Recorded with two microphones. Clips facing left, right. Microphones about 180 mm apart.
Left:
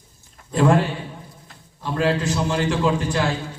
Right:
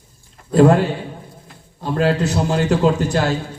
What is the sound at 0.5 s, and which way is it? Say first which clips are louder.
A man's voice: right 5 dB; 40° right (ahead or behind).